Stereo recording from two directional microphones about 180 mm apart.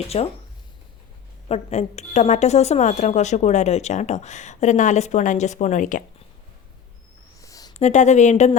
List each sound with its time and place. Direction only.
0.1 s a woman's voice: 35° left (ahead or behind)
1.5 s a woman's voice: 35° left (ahead or behind)
7.4 s a sound: 20° left (ahead or behind)
7.7 s a woman's voice: 40° left (ahead or behind)